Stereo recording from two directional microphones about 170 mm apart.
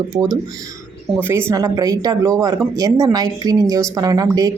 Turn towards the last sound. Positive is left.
turn(degrees=-20)  # may be behind; listen again after turning